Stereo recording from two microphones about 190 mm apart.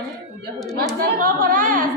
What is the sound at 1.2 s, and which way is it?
Speech, 45° right (ahead or behind).